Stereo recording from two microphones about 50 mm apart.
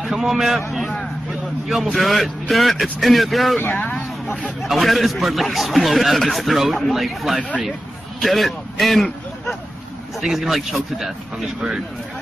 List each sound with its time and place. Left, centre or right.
0.0 s a man's voice: centre
1.9 s a man's voice: centre
3.7 s speech: left
4.6 s a man's voice: centre